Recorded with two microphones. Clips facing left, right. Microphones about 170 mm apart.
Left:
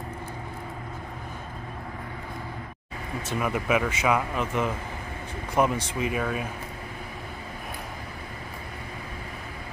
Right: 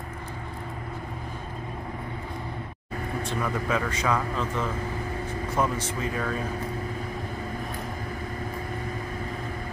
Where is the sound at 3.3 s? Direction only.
15° left (ahead or behind).